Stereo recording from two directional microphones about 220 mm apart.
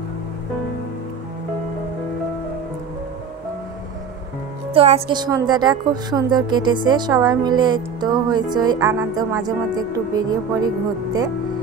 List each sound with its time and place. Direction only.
4.7 s a woman's voice: 25° right (ahead or behind)